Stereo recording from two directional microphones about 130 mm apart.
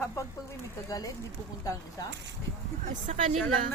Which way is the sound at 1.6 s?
25° left (ahead or behind).